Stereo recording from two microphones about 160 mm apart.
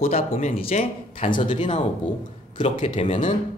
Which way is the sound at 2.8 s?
35° left (ahead or behind).